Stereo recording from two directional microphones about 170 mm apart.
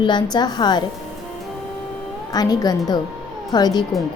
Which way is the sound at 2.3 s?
20° left (ahead or behind).